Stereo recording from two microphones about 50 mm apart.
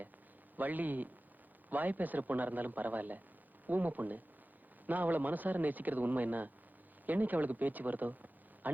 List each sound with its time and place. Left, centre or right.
0.5 s speech: right